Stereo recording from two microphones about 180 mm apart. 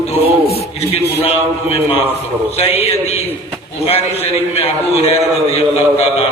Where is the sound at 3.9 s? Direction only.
35° left (ahead or behind).